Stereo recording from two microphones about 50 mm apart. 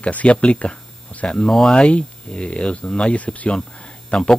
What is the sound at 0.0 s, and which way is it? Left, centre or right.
A man's voice, left.